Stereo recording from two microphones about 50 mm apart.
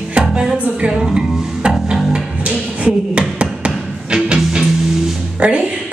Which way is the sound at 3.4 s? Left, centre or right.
Right.